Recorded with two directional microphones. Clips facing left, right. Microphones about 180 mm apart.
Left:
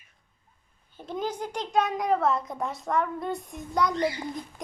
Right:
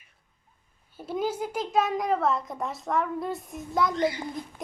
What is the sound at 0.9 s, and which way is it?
A child's voice, 5° right (ahead or behind).